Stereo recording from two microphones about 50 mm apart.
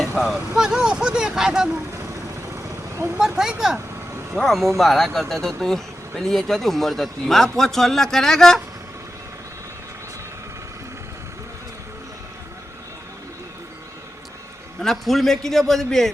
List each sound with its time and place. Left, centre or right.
0.2 s speech: centre
0.5 s speech: centre
3.2 s speech: centre
4.4 s a man's voice: centre
14.8 s a man's voice: centre